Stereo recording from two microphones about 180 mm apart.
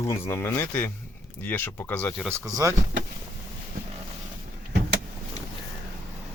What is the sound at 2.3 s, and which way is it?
Speech, 15° right (ahead or behind).